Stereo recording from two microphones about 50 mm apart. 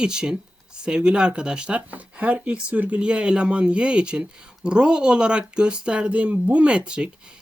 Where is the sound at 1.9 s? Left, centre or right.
Right.